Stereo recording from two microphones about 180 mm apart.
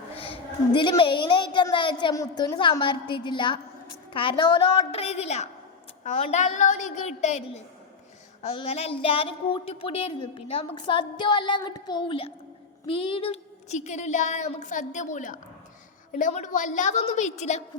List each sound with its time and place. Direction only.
0.2 s speech: 30° left (ahead or behind)
8.5 s speech: 35° left (ahead or behind)